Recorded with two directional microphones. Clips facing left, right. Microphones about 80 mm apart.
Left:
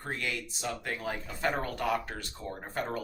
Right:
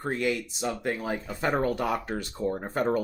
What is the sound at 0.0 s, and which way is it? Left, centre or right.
Speech, centre.